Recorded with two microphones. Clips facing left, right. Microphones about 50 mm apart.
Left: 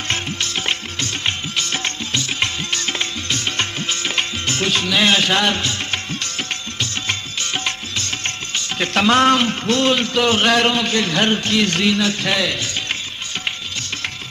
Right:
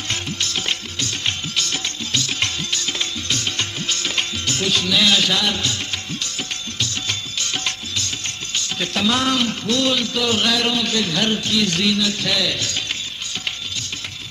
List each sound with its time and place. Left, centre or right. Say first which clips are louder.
0.1 s music: left 2 dB; left
7.9 s music: left 3 dB; left